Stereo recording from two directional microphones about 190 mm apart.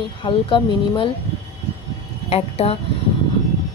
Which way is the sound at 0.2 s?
25° left (ahead or behind).